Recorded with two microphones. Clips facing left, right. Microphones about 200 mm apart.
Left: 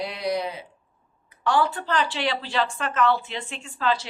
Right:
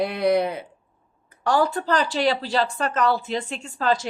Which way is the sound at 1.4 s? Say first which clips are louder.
Right 2 dB; 40° right (ahead or behind).